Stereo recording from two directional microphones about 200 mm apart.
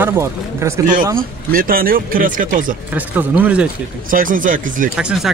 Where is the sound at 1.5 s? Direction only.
45° right (ahead or behind).